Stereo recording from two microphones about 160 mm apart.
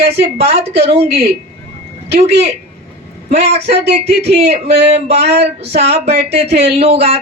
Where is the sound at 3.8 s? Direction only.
90° right.